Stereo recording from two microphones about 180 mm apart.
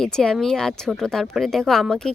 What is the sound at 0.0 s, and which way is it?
Speech, 5° left (ahead or behind).